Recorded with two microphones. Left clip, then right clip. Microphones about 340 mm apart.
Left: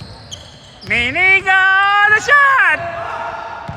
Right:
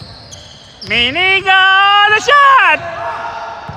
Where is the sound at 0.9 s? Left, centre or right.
Centre.